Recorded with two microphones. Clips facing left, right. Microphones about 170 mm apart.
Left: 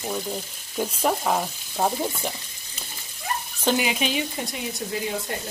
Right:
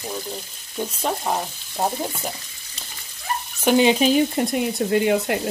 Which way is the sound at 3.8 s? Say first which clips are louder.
Right 9 dB; 35° right (ahead or behind).